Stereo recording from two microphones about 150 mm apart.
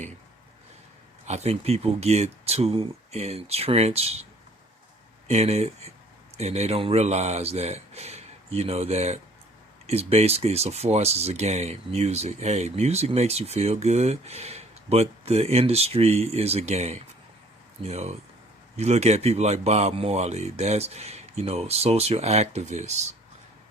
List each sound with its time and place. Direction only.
1.3 s speech: 45° right (ahead or behind)
5.3 s speech: 45° right (ahead or behind)